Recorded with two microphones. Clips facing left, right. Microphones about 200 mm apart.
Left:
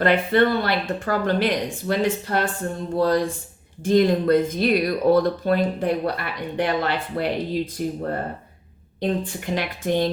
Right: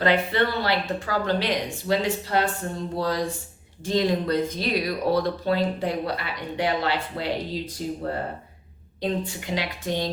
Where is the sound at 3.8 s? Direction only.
50° left (ahead or behind).